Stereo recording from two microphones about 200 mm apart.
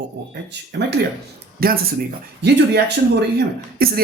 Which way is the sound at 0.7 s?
55° right (ahead or behind).